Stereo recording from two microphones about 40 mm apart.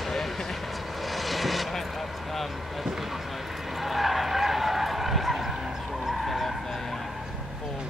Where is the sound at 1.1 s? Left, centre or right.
Centre.